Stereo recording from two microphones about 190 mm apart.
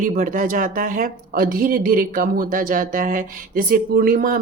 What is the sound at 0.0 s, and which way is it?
A woman's voice, 45° right (ahead or behind).